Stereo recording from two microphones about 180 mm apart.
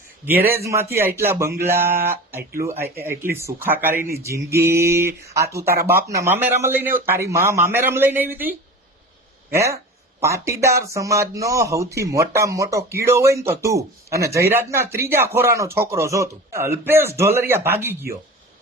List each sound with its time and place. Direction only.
0.6 s speech: 15° right (ahead or behind)